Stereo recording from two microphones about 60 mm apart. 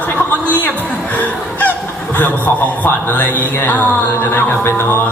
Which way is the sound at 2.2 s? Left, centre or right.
Left.